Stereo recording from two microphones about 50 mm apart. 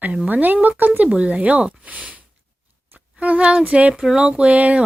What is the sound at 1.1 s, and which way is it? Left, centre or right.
Speech, right.